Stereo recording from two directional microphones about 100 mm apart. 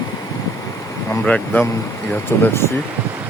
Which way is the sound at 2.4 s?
25° left (ahead or behind).